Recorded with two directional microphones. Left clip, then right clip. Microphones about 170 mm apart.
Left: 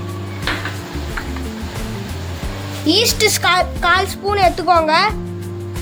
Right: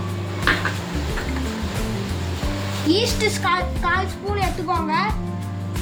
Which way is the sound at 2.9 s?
65° left (ahead or behind).